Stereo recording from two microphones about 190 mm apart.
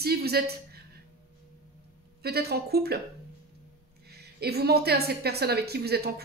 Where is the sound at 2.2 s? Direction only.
55° right (ahead or behind).